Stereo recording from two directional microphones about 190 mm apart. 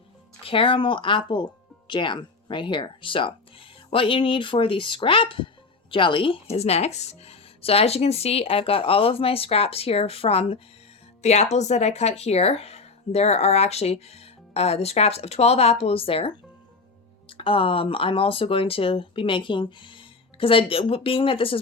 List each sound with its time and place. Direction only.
0.4 s speech: 25° left (ahead or behind)